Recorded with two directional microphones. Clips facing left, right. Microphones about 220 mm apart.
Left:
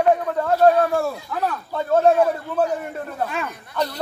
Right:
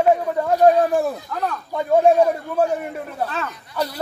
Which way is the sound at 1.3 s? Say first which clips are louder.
Left 1 dB; 5° left (ahead or behind).